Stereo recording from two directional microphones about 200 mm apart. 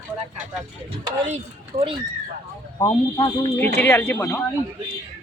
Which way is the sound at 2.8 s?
15° left (ahead or behind).